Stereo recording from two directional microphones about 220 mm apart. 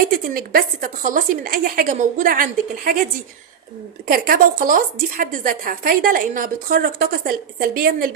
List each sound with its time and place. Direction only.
0.3 s speech: 40° right (ahead or behind)
4.0 s a woman's voice: 40° right (ahead or behind)